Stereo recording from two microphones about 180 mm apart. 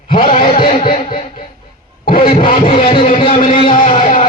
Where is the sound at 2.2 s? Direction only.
30° left (ahead or behind).